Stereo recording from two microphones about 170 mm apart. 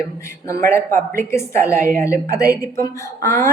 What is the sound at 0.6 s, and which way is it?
Speech, 15° left (ahead or behind).